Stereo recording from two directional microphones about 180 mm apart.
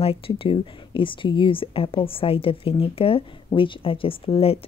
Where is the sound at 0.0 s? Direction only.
30° left (ahead or behind).